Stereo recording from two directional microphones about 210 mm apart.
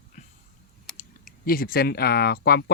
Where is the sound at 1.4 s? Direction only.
45° left (ahead or behind).